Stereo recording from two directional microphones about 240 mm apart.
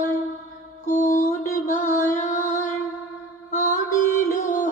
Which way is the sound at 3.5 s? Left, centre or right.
Left.